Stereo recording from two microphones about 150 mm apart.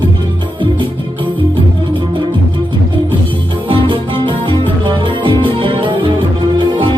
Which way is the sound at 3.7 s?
35° right (ahead or behind).